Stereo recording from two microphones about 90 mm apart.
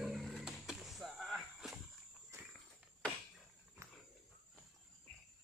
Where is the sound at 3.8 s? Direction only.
35° right (ahead or behind).